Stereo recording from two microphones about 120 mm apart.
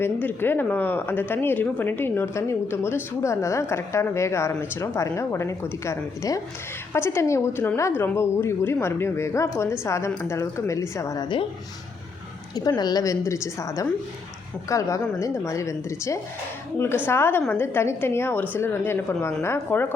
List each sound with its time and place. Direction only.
0.0 s speech: 15° left (ahead or behind)
12.5 s speech: 35° left (ahead or behind)